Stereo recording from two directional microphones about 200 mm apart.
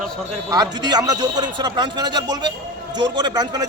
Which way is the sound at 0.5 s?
20° right (ahead or behind).